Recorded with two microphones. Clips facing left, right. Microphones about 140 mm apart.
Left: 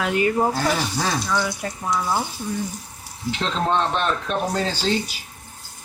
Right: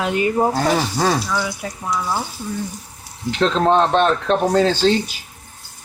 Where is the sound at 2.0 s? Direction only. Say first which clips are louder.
Left 1 dB; 10° left (ahead or behind).